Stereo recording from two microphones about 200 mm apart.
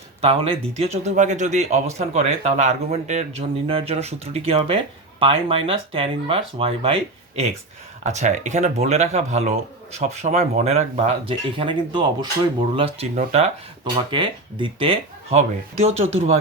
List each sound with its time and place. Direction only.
0.2 s speech: 30° right (ahead or behind)
13.9 s speech: 25° right (ahead or behind)